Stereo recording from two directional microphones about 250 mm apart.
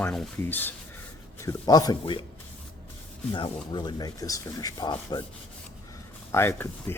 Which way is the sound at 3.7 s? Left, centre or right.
Centre.